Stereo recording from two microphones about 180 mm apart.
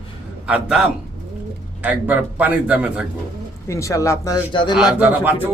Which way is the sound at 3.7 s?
15° left (ahead or behind).